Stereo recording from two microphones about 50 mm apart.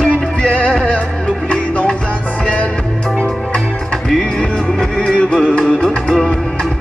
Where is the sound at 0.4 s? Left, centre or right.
Left.